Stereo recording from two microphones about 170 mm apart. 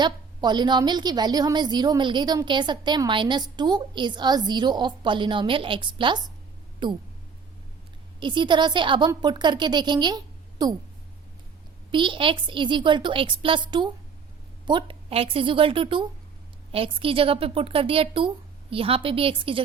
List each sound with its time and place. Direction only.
0.0 s a woman's voice: 25° right (ahead or behind)
8.2 s a woman's voice: 25° right (ahead or behind)
11.9 s a woman's voice: 30° right (ahead or behind)